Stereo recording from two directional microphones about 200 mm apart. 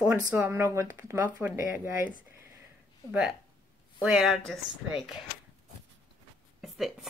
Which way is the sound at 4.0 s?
5° right (ahead or behind).